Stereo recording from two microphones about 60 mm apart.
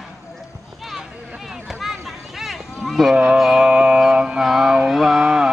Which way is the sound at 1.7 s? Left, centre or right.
Centre.